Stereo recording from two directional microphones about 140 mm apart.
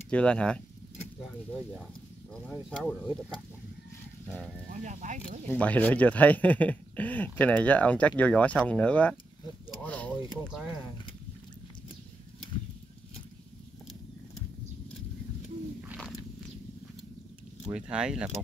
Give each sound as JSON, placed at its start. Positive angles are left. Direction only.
{"t": 0.1, "sound": "speech", "side_deg": 10}
{"t": 2.5, "sound": "speech", "side_deg": -5}
{"t": 4.6, "sound": "speech", "side_deg": -60}
{"t": 5.5, "sound": "speech", "side_deg": 10}
{"t": 17.7, "sound": "speech", "side_deg": -5}